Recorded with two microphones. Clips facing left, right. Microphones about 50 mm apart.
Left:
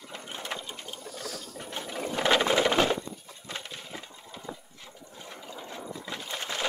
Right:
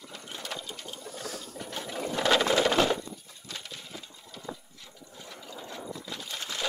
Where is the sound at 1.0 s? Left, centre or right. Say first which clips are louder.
Even; right.